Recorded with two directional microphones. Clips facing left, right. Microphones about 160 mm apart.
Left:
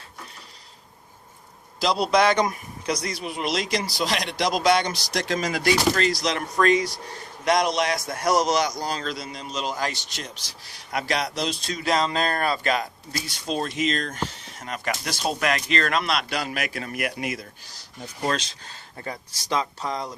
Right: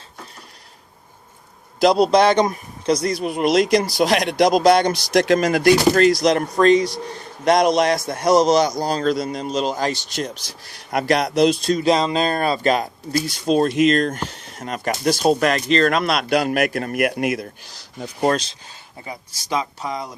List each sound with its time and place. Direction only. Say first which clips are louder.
1.8 s speech: right 9 dB; 45° right (ahead or behind)
2.0 s speech: right 5 dB; 30° right (ahead or behind)
2.9 s speech: right 9 dB; 45° right (ahead or behind)
4.9 s speech: right 10 dB; 60° right (ahead or behind); by 6.5 s 45° right (ahead or behind)
6.6 s speech: right 4 dB; 25° right (ahead or behind)
7.4 s a man's voice: right 6 dB; 40° right (ahead or behind)
8.0 s a man's voice: right 6 dB; 25° right (ahead or behind); by 11.7 s 50° right (ahead or behind)
11.9 s speech: right 4 dB; 20° right (ahead or behind)
12.6 s speech: right 6 dB; 40° right (ahead or behind); by 17.7 s 55° right (ahead or behind)
17.7 s speech: right 9 dB; 90° right
18.9 s speech: even; 15° right (ahead or behind)